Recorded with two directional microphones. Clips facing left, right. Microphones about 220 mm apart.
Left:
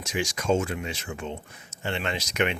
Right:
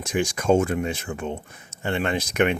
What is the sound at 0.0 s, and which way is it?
Speech, 55° right (ahead or behind).